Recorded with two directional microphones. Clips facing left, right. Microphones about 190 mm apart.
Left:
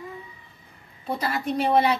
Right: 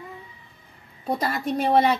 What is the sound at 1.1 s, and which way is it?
Speech, 40° right (ahead or behind).